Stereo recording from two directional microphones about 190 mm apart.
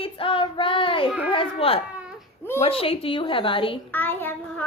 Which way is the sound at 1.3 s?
30° left (ahead or behind).